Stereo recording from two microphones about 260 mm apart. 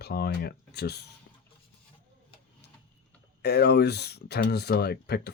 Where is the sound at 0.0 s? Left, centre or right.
Left.